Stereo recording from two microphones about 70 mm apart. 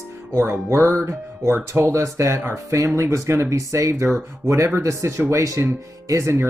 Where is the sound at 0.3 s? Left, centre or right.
Right.